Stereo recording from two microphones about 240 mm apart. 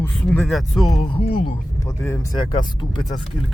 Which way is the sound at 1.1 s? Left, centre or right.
Left.